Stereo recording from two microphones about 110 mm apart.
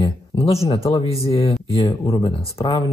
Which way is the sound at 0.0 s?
65° left (ahead or behind).